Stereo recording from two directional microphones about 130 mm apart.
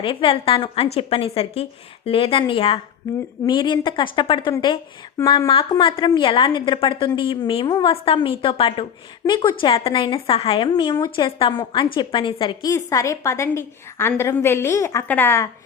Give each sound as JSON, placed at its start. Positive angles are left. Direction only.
{"t": 0.0, "sound": "a woman's voice", "side_deg": 40}
{"t": 10.7, "sound": "a woman's voice", "side_deg": 35}
{"t": 12.6, "sound": "a woman's voice", "side_deg": 25}